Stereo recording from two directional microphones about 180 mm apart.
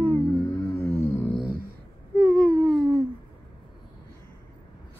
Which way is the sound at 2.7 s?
20° right (ahead or behind).